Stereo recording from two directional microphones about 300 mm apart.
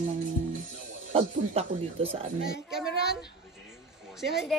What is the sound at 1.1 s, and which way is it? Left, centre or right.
Speech, right.